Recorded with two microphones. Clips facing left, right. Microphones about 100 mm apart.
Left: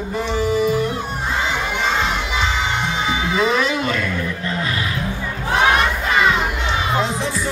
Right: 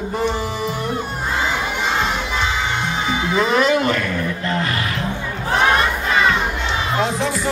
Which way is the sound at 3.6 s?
55° right (ahead or behind).